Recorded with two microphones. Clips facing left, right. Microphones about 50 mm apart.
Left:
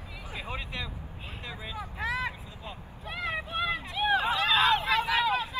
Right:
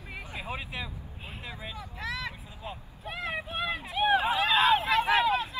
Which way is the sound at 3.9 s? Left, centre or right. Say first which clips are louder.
Right 3 dB; centre.